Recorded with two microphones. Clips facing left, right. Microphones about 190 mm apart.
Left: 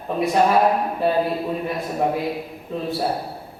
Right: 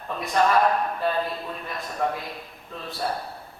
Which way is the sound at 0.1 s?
10° left (ahead or behind).